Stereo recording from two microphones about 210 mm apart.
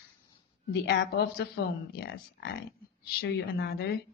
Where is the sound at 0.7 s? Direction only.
50° left (ahead or behind).